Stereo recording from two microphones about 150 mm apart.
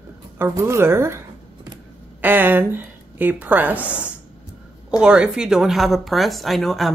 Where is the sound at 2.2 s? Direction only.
15° right (ahead or behind).